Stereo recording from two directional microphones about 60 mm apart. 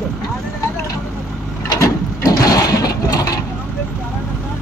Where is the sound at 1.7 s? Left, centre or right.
Left.